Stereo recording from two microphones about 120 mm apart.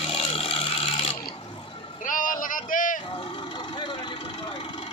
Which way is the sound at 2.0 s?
90° left.